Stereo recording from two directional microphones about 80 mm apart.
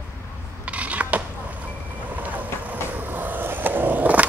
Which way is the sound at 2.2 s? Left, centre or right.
Centre.